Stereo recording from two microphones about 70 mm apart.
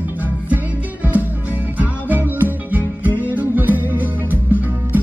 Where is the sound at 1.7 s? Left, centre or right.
Right.